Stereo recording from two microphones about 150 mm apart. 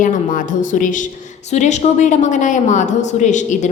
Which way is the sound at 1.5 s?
50° left (ahead or behind).